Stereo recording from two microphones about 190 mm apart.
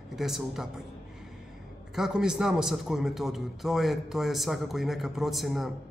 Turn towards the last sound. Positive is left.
turn(degrees=0)  # may be behind; listen again after turning